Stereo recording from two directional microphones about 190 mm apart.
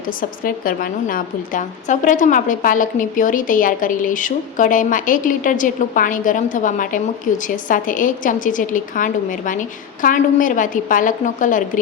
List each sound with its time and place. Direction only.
0.2 s a woman's voice: 50° left (ahead or behind)